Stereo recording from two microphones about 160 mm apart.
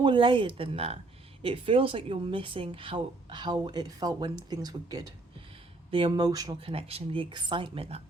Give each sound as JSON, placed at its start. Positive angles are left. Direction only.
{"t": 0.0, "sound": "a woman's voice", "side_deg": -30}
{"t": 6.6, "sound": "speech", "side_deg": -35}